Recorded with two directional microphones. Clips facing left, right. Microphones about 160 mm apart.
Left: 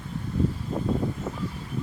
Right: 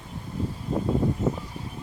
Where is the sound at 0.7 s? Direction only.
35° right (ahead or behind).